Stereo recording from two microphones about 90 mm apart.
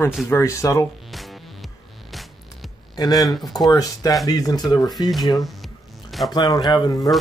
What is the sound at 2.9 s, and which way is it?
Speech, 45° left (ahead or behind).